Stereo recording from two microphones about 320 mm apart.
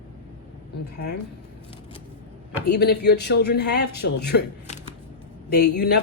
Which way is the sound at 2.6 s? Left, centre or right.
Left.